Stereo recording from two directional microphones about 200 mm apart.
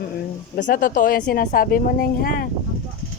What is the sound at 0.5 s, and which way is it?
Speech, 45° left (ahead or behind).